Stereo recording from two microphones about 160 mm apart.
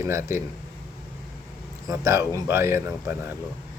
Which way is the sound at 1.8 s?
20° right (ahead or behind).